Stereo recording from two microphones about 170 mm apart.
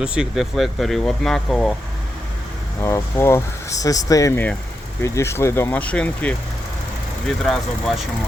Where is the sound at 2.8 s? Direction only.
15° left (ahead or behind).